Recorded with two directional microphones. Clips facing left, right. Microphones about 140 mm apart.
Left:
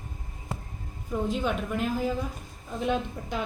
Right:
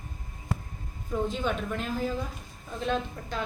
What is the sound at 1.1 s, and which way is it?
A woman's voice, 5° left (ahead or behind).